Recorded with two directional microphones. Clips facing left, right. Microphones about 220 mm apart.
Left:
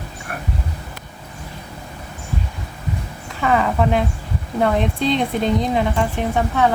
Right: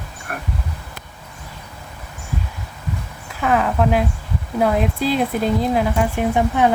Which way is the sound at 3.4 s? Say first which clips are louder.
Even; centre (ahead or behind).